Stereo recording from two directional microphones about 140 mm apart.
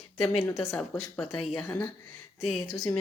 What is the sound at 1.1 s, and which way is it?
Speech, 10° left (ahead or behind).